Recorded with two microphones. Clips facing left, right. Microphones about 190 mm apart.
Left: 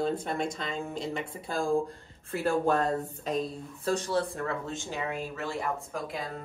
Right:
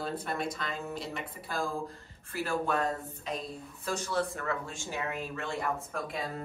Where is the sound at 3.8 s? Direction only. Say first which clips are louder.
Left 4 dB; 35° left (ahead or behind).